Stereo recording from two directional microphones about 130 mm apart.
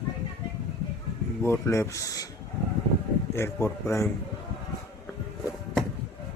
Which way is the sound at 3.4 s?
20° left (ahead or behind).